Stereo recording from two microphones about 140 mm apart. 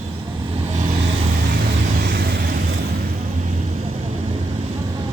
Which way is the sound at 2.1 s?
90° right.